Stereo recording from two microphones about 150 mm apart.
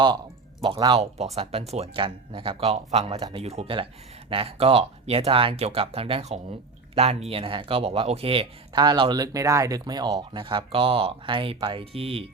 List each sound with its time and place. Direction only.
0.6 s speech: 30° right (ahead or behind)
0.9 s speech: 45° right (ahead or behind)